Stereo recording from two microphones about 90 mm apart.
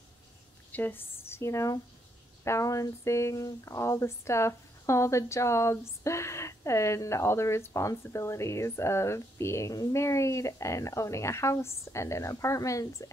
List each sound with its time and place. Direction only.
0.7 s speech: 20° left (ahead or behind); by 13.1 s 35° left (ahead or behind)